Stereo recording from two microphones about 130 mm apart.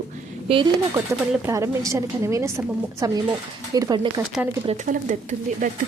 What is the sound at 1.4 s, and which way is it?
A woman's voice, 20° right (ahead or behind).